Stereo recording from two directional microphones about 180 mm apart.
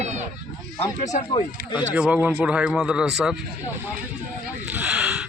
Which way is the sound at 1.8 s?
5° right (ahead or behind).